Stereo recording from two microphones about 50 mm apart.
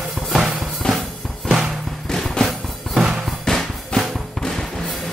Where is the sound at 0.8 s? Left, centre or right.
Left.